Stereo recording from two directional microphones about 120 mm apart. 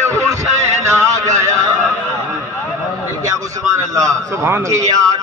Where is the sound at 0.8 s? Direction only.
25° right (ahead or behind).